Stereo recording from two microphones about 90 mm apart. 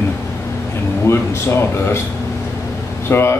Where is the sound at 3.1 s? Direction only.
30° left (ahead or behind).